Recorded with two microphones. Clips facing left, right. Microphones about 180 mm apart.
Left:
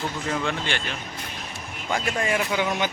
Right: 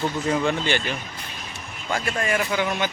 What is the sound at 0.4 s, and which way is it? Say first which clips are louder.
Speech: right 5 dB; centre (ahead or behind).